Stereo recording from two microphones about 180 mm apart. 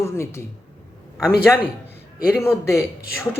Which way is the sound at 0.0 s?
15° left (ahead or behind).